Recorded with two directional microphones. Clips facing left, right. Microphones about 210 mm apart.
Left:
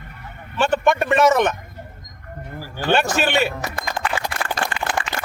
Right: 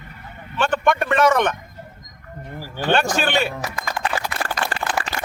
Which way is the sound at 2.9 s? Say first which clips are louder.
Left 1 dB; 5° left (ahead or behind).